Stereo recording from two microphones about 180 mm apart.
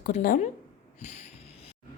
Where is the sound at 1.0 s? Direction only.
40° left (ahead or behind).